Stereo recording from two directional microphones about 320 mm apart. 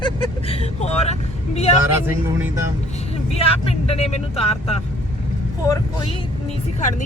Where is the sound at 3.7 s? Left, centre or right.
Centre.